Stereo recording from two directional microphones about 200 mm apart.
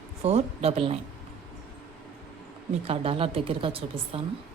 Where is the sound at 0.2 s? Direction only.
30° right (ahead or behind).